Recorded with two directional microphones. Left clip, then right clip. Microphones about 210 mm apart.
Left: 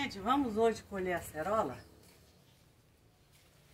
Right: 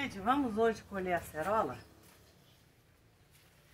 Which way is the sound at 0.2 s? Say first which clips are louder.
Even; centre (ahead or behind).